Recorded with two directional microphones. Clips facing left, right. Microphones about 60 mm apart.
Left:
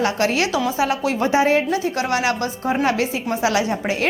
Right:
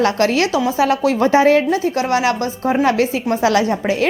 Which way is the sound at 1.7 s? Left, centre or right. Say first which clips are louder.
Right 4 dB; right.